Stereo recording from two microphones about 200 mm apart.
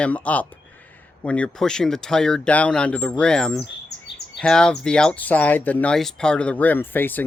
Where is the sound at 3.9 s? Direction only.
55° left (ahead or behind).